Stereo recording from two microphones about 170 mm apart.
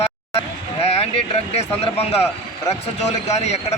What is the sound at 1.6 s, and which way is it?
A man's voice, 35° left (ahead or behind).